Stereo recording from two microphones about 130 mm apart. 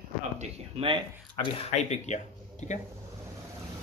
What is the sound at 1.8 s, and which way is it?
Speech, 60° left (ahead or behind).